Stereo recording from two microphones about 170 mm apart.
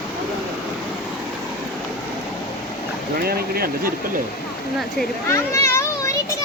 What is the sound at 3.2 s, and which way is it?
Speech, 60° right (ahead or behind).